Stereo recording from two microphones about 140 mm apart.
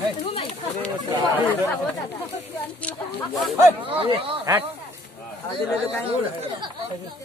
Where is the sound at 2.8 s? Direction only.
10° left (ahead or behind).